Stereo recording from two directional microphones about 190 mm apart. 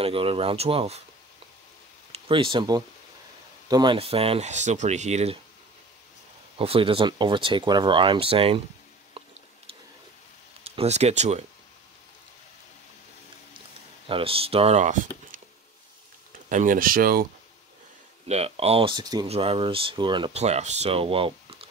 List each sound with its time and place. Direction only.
0.0 s speech: 30° right (ahead or behind)
2.1 s speech: 30° right (ahead or behind)
6.6 s speech: 30° right (ahead or behind)
10.6 s speech: 35° right (ahead or behind)
14.0 s speech: 30° right (ahead or behind)
16.4 s speech: 45° right (ahead or behind)
18.3 s speech: 30° right (ahead or behind)
19.2 s speech: 30° right (ahead or behind)